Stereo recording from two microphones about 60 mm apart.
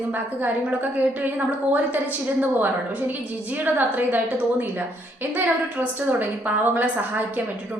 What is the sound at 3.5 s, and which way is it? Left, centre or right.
A woman's voice, right.